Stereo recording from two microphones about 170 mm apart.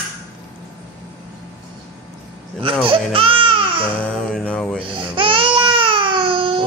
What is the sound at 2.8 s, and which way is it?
Speech, 30° right (ahead or behind).